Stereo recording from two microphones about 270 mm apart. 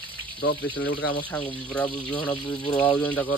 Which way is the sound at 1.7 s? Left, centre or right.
Centre.